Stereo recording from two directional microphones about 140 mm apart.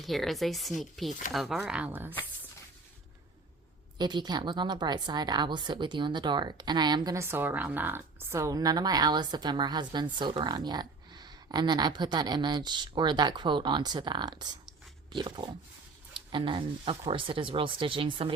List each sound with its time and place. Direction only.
0.0 s speech: centre (ahead or behind)
3.9 s a woman's voice: 30° right (ahead or behind)